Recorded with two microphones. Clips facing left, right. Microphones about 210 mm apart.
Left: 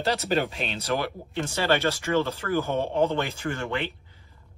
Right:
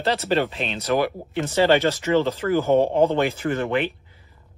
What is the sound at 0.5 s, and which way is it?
Speech, centre (ahead or behind).